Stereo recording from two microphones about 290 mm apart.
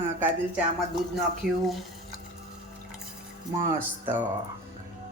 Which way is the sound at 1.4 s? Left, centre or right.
Centre.